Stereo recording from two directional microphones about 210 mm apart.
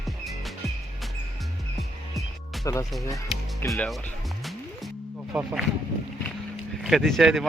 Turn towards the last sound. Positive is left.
turn(degrees=0)  # may be behind; listen again after turning